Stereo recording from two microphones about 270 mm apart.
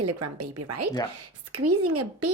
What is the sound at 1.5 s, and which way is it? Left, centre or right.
Speech, right.